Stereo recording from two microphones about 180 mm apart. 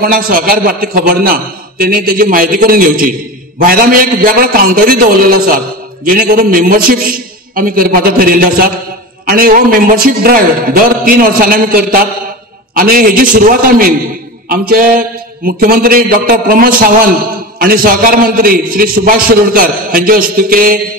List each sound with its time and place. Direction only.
0.0 s a man's voice: 55° right (ahead or behind)